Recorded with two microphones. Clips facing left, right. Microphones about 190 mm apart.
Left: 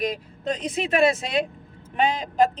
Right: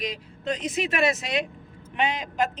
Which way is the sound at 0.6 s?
30° left (ahead or behind).